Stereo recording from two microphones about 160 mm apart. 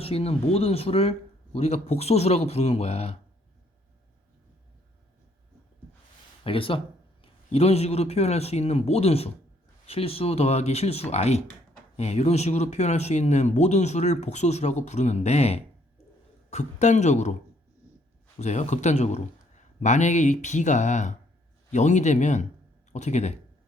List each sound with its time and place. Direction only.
0.0 s speech: 40° left (ahead or behind)
6.4 s a man's voice: 35° left (ahead or behind)
18.3 s speech: 45° left (ahead or behind)